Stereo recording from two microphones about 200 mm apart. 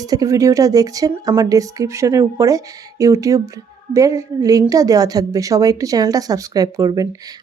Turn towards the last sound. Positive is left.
turn(degrees=-15)  # may be behind; listen again after turning